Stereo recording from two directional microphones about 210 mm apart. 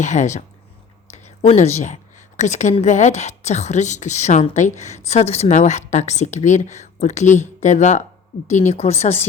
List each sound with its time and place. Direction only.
0.0 s a woman's voice: 35° left (ahead or behind)